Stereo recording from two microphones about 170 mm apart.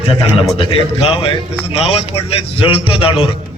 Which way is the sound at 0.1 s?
35° left (ahead or behind).